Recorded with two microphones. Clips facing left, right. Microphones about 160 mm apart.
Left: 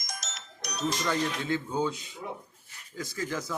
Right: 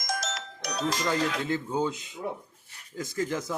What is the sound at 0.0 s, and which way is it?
Music, 90° right.